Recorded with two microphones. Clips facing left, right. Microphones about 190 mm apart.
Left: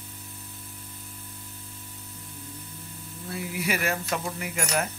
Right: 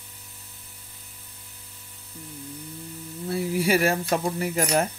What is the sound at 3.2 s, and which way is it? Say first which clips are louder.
Speech: right 7 dB; 30° right (ahead or behind).